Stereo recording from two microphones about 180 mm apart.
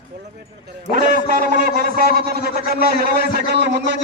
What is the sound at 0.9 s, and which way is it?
A man's voice, 50° right (ahead or behind).